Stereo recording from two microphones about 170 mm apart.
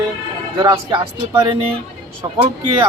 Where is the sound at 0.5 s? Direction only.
30° right (ahead or behind).